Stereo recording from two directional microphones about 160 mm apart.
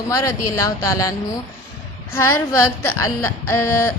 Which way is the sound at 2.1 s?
15° left (ahead or behind).